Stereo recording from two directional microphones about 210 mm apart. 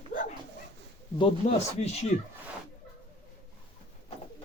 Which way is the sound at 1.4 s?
35° left (ahead or behind).